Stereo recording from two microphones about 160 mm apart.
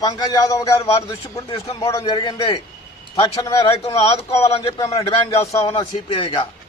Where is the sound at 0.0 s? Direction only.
20° left (ahead or behind).